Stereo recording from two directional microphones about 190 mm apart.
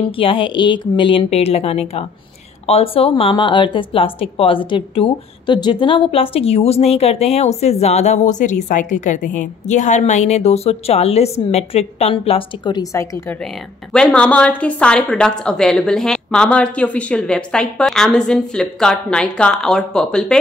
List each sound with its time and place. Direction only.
0.1 s a woman's voice: 25° left (ahead or behind)
13.9 s a woman's voice: 5° left (ahead or behind)